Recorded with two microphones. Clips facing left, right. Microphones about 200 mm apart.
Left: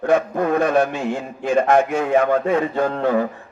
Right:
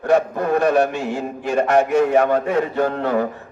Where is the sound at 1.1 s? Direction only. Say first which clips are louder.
Left 2 dB; 70° right (ahead or behind).